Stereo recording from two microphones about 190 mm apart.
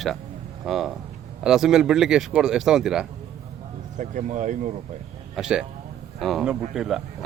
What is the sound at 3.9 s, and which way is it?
Speech, 40° right (ahead or behind).